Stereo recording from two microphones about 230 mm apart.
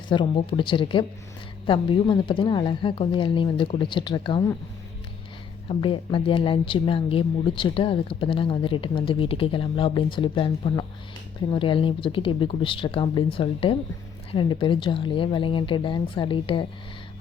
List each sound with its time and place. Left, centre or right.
0.1 s speech: left
5.6 s speech: left